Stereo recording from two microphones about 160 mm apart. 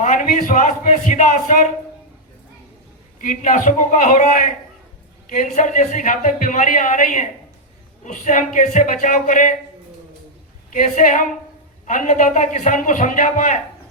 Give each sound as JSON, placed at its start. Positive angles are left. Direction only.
{"t": 0.0, "sound": "a man's voice", "side_deg": 55}
{"t": 3.2, "sound": "a man's voice", "side_deg": 55}
{"t": 10.7, "sound": "a man's voice", "side_deg": 55}